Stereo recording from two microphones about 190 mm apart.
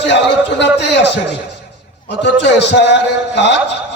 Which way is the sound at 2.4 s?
65° left (ahead or behind).